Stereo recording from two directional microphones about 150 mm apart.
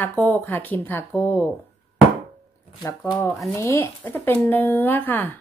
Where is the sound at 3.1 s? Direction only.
20° left (ahead or behind).